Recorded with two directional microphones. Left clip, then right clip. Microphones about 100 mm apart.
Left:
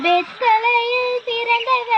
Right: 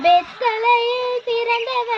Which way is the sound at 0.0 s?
45° right (ahead or behind).